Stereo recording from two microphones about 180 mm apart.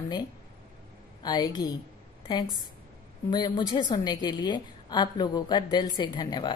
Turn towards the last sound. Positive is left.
turn(degrees=25)  # may be behind; listen again after turning